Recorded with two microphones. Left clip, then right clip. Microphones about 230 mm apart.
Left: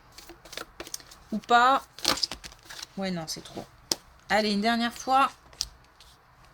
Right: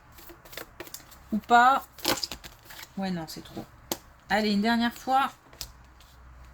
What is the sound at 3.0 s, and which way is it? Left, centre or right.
Speech, left.